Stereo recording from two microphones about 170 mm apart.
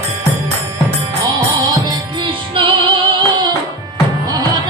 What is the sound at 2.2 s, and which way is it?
Music, 30° right (ahead or behind).